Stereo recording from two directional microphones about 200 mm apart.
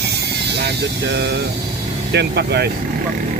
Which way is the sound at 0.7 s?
55° right (ahead or behind).